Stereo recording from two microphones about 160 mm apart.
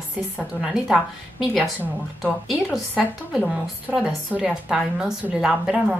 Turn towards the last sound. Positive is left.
turn(degrees=-5)  # may be behind; listen again after turning